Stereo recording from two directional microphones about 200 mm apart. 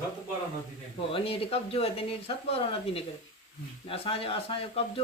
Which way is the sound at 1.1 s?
25° left (ahead or behind).